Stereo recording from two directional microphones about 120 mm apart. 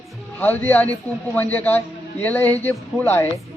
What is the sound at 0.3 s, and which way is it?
A man's voice, 15° left (ahead or behind).